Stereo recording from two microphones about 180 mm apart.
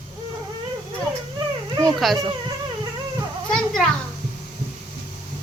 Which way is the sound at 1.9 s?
Centre (ahead or behind).